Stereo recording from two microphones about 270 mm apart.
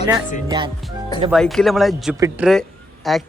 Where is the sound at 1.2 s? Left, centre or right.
Centre.